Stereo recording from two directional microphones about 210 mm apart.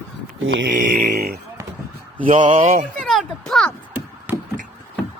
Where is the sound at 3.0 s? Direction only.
Centre (ahead or behind).